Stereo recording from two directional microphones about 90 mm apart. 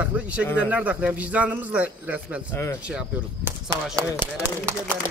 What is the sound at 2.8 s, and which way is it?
Speech, 15° right (ahead or behind).